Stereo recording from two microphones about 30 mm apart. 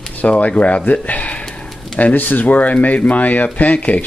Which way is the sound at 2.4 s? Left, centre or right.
Left.